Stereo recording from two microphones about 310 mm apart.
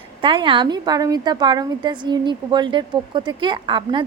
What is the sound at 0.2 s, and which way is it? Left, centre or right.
Speech, centre.